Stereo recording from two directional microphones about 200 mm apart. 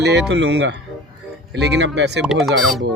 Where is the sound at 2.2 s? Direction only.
Centre (ahead or behind).